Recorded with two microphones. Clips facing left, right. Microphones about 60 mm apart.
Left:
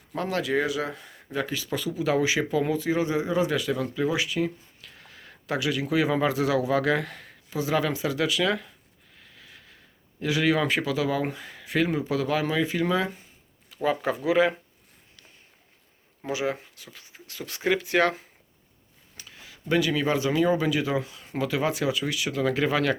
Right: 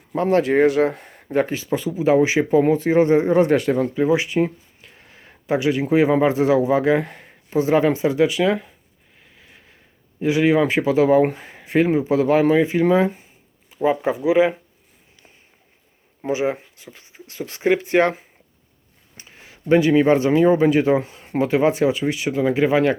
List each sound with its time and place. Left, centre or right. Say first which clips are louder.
0.2 s a man's voice: right 10 dB; right
9.2 s a sound: right 1 dB; right
10.2 s a man's voice: right 7 dB; right
16.2 s a man's voice: right 7 dB; right